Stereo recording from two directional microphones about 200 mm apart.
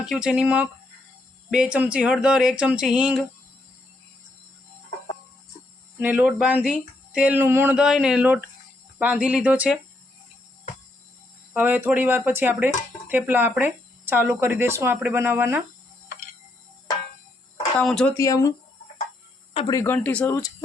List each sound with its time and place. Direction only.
0.0 s speech: 5° right (ahead or behind)
6.0 s speech: 10° right (ahead or behind)
11.5 s speech: 10° right (ahead or behind)
17.7 s speech: 5° left (ahead or behind)
18.2 s speech: 15° left (ahead or behind)
19.5 s speech: 25° left (ahead or behind)
19.8 s speech: 10° left (ahead or behind)